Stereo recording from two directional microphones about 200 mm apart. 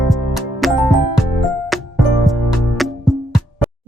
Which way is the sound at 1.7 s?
Centre (ahead or behind).